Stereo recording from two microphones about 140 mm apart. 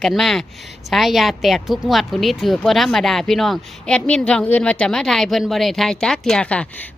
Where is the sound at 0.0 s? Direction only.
Centre (ahead or behind).